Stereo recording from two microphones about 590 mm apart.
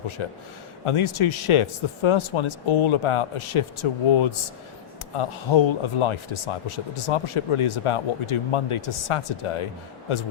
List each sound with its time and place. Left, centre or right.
0.2 s speech: left